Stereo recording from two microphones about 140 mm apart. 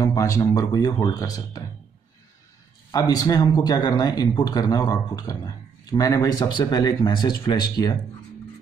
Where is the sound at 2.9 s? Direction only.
25° left (ahead or behind).